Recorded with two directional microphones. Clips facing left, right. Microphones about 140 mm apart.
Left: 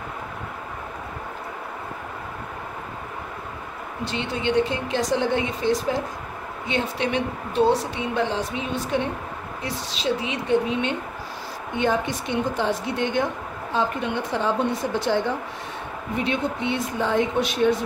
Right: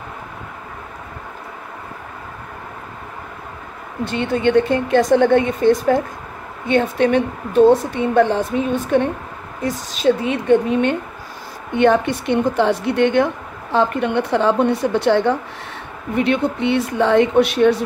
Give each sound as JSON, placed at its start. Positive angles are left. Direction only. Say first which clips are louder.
{"t": 4.0, "sound": "a woman's voice", "louder": "right 9 dB", "side_deg": -55}
{"t": 11.7, "sound": "a woman's voice", "louder": "right 8 dB", "side_deg": -60}